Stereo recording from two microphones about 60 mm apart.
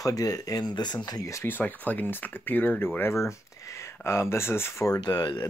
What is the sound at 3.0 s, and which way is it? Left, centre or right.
Speech, left.